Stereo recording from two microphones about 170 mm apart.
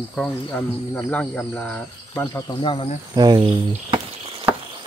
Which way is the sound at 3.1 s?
25° right (ahead or behind).